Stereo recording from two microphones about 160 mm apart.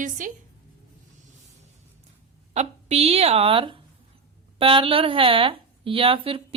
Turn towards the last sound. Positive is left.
turn(degrees=-35)  # may be behind; listen again after turning